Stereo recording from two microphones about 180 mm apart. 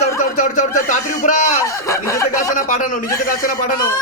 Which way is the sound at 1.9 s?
15° left (ahead or behind).